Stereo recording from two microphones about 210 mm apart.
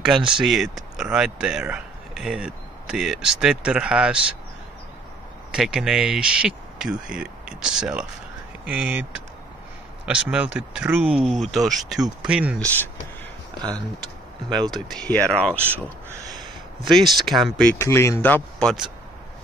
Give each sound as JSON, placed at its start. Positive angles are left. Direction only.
{"t": 0.0, "sound": "speech", "side_deg": -5}
{"t": 5.5, "sound": "speech", "side_deg": -5}
{"t": 10.0, "sound": "speech", "side_deg": -5}
{"t": 12.5, "sound": "speech", "side_deg": 10}
{"t": 14.7, "sound": "speech", "side_deg": 0}
{"t": 15.5, "sound": "speech", "side_deg": -10}
{"t": 16.3, "sound": "a sound", "side_deg": 0}
{"t": 17.5, "sound": "speech", "side_deg": 5}